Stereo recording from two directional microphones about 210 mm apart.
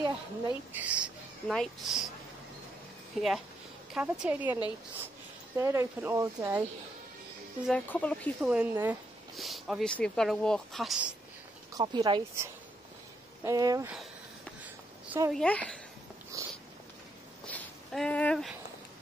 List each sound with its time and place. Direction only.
0.7 s speech: 5° right (ahead or behind)
3.1 s speech: centre (ahead or behind)
7.6 s speech: 5° left (ahead or behind)
11.7 s speech: 20° right (ahead or behind)
14.6 s a sound: 10° right (ahead or behind)
15.3 s speech: 5° left (ahead or behind)
16.3 s cat: 15° right (ahead or behind)
17.5 s a sound: 5° left (ahead or behind)